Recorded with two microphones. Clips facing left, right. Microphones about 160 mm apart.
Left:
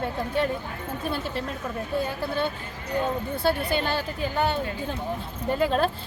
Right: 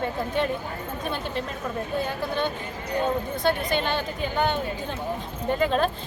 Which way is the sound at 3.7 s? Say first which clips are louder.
Even; 5° left (ahead or behind).